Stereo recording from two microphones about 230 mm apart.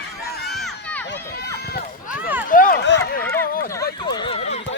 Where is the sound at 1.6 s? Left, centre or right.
Left.